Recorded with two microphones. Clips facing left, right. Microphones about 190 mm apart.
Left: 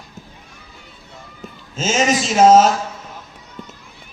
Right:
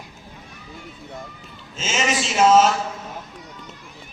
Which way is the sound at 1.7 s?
40° left (ahead or behind).